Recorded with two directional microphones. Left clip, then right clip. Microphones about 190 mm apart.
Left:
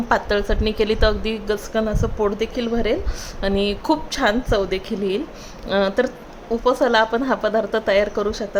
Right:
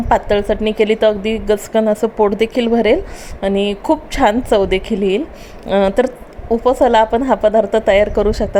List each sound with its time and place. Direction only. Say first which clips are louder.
0.1 s a woman's voice: right 6 dB; 15° right (ahead or behind)
3.4 s a woman's voice: right 5 dB; 15° right (ahead or behind)